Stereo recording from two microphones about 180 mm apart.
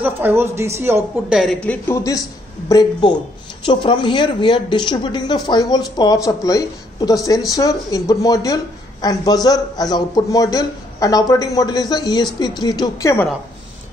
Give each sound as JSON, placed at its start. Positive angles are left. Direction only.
{"t": 0.0, "sound": "speech", "side_deg": -10}
{"t": 1.4, "sound": "speech", "side_deg": 5}